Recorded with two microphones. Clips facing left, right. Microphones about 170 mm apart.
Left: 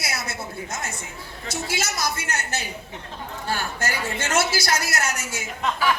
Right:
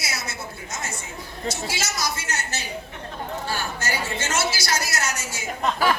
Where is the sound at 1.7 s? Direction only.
55° left (ahead or behind).